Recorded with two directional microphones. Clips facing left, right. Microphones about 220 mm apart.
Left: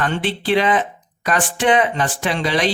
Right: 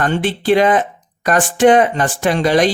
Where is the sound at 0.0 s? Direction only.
45° right (ahead or behind).